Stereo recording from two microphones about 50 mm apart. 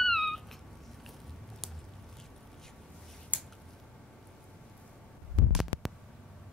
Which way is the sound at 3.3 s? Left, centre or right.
Left.